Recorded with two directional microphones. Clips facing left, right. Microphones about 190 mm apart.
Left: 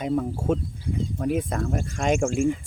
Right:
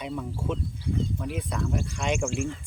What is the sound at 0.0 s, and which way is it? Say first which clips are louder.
Speech: left 7 dB; 45° left (ahead or behind).